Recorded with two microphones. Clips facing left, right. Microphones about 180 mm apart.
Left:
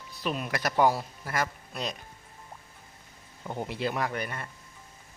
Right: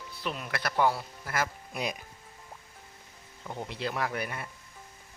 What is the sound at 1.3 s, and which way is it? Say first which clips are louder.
Speech: left 1 dB; 5° right (ahead or behind).